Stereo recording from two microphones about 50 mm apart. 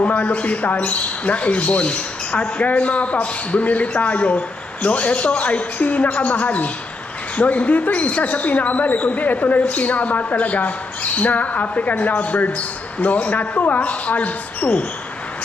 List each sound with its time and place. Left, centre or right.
0.0 s speech: left